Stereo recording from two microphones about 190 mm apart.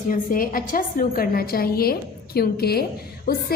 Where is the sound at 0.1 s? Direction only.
45° left (ahead or behind).